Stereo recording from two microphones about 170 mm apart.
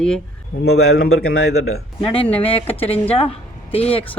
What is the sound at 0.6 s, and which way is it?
Speech, 70° left (ahead or behind).